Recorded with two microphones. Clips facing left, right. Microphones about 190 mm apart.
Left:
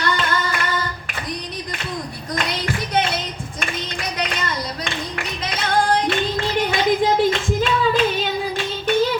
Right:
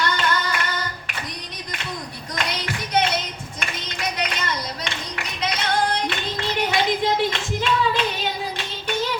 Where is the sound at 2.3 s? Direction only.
45° left (ahead or behind).